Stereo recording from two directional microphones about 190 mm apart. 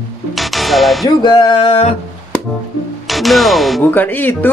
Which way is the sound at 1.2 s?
30° left (ahead or behind).